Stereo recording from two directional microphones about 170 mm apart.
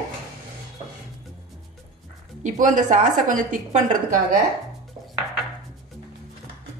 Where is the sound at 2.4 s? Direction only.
50° right (ahead or behind).